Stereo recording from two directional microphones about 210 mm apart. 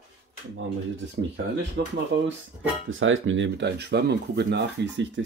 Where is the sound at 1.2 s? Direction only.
55° right (ahead or behind).